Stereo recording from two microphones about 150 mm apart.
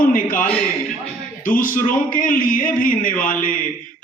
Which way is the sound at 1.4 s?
65° left (ahead or behind).